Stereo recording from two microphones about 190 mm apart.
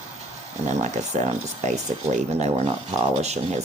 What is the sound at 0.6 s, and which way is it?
Speech, 40° right (ahead or behind).